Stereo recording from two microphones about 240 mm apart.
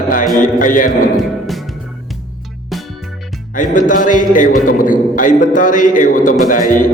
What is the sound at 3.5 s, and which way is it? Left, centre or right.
A man's voice, left.